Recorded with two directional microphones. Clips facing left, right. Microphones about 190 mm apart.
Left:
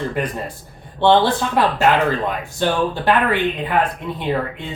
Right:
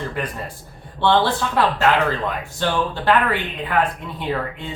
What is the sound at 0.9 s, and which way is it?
Speech, 15° left (ahead or behind).